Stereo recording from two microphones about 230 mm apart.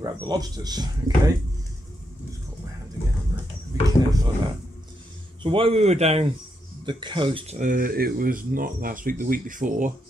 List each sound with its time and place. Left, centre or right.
0.0 s speech: centre
3.3 s a sound: centre
5.4 s a man's voice: right